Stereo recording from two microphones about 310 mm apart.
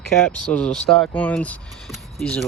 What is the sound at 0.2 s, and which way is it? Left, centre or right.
Speech, centre.